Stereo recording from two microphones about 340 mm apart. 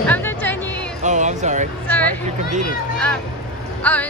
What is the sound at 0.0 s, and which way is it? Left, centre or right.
Music, centre.